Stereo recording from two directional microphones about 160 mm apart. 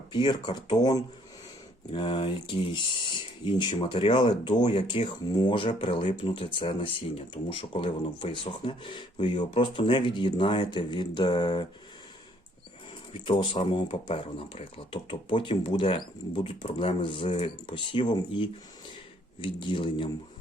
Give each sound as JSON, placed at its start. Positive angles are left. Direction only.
{"t": 0.1, "sound": "speech", "side_deg": 30}
{"t": 3.4, "sound": "speech", "side_deg": 30}
{"t": 13.3, "sound": "speech", "side_deg": 35}